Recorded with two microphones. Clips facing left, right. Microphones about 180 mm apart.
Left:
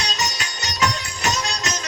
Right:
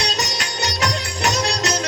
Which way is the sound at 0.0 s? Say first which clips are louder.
Right 3 dB; 65° right (ahead or behind).